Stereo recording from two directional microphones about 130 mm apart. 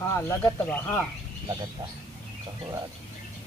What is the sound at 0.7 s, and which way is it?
Speech, 15° left (ahead or behind).